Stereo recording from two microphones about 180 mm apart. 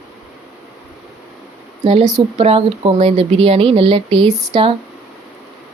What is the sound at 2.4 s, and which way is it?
Speech, 30° right (ahead or behind).